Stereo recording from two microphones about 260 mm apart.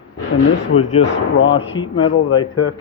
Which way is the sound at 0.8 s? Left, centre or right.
Left.